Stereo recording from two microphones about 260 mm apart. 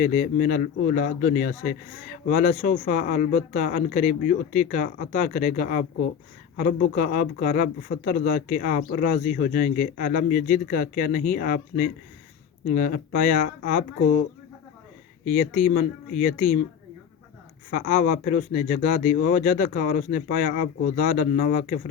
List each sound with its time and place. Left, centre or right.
0.0 s speech: left
15.2 s speech: left
17.7 s speech: left